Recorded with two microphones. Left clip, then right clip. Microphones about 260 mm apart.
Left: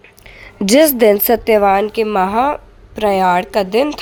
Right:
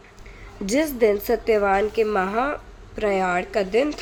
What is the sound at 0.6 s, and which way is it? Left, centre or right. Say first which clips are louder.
A woman's voice: left 10 dB; left.